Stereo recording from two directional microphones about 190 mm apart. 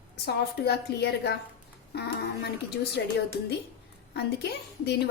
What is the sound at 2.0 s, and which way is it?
A woman's voice, 60° left (ahead or behind).